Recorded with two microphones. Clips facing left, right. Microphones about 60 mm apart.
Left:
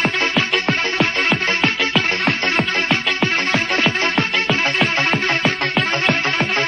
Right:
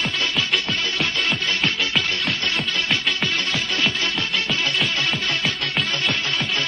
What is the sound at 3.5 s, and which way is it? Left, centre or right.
Music, left.